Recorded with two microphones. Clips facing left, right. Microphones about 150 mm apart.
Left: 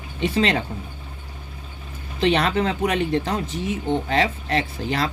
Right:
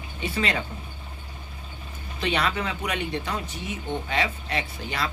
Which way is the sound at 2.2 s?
35° left (ahead or behind).